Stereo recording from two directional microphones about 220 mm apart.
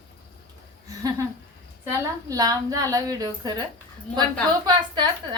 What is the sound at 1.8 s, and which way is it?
A woman's voice, 15° right (ahead or behind).